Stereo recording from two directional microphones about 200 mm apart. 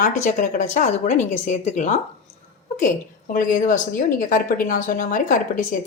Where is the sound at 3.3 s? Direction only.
40° left (ahead or behind).